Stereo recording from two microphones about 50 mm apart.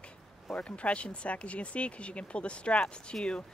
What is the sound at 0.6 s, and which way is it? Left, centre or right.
Speech, left.